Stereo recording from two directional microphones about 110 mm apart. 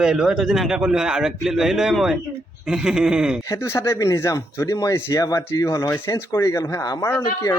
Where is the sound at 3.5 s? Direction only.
25° left (ahead or behind).